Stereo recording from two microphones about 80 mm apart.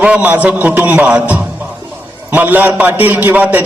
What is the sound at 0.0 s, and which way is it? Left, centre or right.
A man's voice, centre.